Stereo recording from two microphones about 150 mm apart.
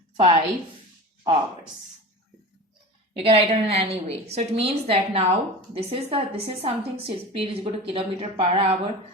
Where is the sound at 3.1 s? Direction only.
40° right (ahead or behind).